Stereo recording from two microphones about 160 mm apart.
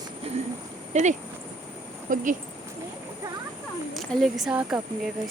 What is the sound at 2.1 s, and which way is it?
Speech, 55° right (ahead or behind).